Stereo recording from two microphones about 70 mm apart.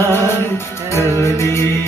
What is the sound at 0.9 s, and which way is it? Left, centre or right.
Music, left.